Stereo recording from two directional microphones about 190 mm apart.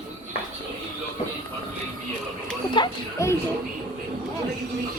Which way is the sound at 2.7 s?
20° left (ahead or behind).